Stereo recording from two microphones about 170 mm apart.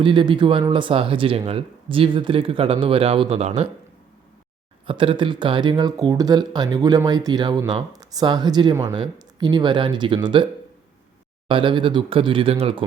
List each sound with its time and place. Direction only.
0.0 s speech: 30° right (ahead or behind)
4.9 s speech: 30° right (ahead or behind)